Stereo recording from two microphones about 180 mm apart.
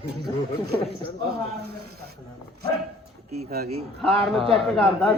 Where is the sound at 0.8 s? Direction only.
30° left (ahead or behind).